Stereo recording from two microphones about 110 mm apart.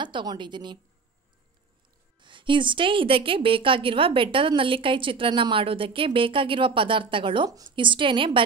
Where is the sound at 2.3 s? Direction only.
50° right (ahead or behind).